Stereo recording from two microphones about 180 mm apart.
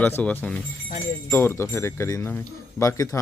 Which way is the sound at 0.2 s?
5° left (ahead or behind).